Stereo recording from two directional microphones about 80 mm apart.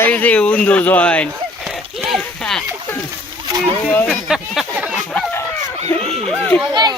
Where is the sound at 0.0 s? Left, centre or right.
Centre.